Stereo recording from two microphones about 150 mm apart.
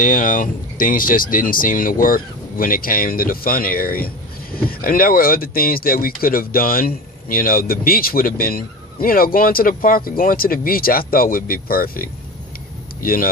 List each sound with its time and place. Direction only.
0.0 s speech: 60° left (ahead or behind)